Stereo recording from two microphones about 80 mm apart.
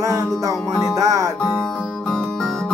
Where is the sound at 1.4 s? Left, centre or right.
Centre.